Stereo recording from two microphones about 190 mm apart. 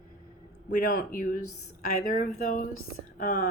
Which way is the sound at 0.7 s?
45° left (ahead or behind).